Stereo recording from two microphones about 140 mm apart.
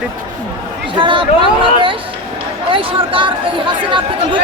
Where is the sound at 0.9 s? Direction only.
35° right (ahead or behind).